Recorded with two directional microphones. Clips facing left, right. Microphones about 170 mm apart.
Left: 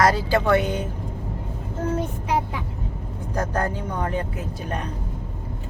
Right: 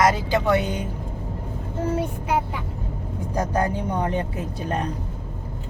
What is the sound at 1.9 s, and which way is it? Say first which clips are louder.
Speech: even; 5° right (ahead or behind).